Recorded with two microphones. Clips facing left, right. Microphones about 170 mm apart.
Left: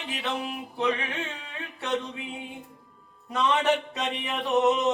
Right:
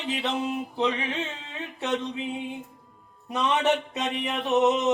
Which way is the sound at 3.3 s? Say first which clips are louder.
Even; 20° right (ahead or behind).